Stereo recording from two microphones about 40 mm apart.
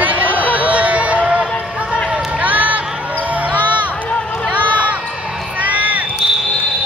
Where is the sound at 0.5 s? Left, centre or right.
Right.